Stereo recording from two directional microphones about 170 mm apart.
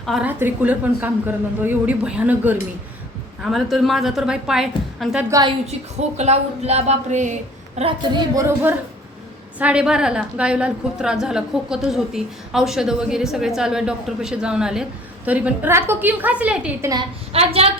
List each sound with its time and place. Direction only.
0.0 s a woman's voice: centre (ahead or behind)
0.3 s a woman's voice: 10° right (ahead or behind)
5.3 s a woman's voice: 25° right (ahead or behind)
6.0 s speech: 40° right (ahead or behind)
7.8 s speech: 30° right (ahead or behind)
8.4 s a woman's voice: 15° right (ahead or behind)
17.3 s speech: 35° right (ahead or behind)